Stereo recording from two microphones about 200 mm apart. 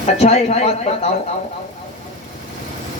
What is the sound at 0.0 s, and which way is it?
Speech, 30° left (ahead or behind).